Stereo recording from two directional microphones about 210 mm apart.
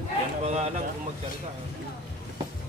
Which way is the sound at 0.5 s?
30° right (ahead or behind).